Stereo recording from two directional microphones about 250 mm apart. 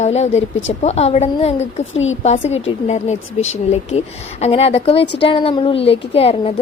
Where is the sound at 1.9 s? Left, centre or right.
Left.